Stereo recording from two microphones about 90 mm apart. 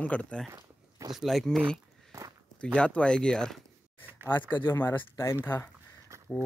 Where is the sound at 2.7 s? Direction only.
10° left (ahead or behind).